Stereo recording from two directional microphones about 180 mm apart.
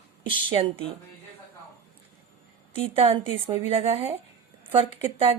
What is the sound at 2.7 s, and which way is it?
Speech, 30° right (ahead or behind).